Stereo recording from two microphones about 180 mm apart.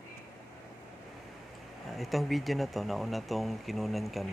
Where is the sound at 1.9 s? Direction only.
Centre (ahead or behind).